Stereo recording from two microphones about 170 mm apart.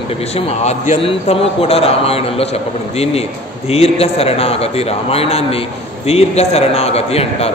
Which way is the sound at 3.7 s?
35° left (ahead or behind).